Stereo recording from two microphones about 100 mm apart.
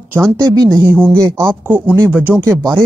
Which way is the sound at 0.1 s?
25° right (ahead or behind).